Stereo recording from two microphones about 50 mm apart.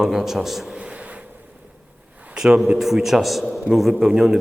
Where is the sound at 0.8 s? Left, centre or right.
Right.